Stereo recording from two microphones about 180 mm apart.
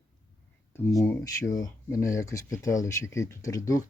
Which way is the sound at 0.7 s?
15° left (ahead or behind).